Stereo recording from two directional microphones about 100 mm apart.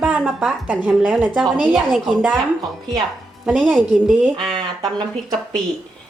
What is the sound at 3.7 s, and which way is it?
Speech, centre (ahead or behind).